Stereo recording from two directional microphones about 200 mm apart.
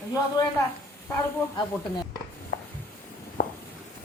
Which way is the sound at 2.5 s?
60° left (ahead or behind).